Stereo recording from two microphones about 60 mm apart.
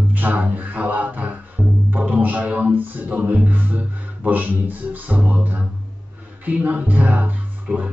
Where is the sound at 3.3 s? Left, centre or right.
Right.